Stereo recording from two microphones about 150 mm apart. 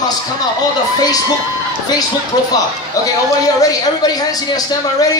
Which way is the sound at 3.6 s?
25° left (ahead or behind).